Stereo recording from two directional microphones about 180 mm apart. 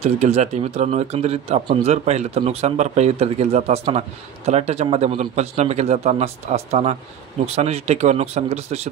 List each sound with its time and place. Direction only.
0.0 s speech: 35° right (ahead or behind)